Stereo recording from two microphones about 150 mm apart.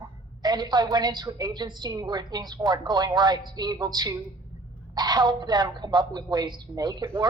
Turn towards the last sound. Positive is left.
turn(degrees=-30)  # may be behind; listen again after turning